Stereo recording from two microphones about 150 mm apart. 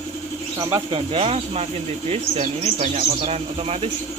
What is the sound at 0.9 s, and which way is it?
Speech, 35° right (ahead or behind).